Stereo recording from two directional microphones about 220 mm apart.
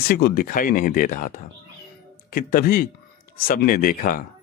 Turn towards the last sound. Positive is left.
turn(degrees=40)  # may be behind; listen again after turning